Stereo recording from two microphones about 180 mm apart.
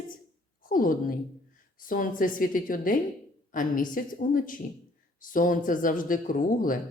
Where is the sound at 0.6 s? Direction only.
50° left (ahead or behind).